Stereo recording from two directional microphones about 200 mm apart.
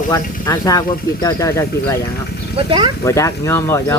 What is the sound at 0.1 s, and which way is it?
Speech, 20° left (ahead or behind).